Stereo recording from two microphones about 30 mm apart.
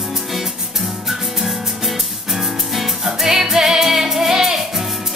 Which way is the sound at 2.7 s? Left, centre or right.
Centre.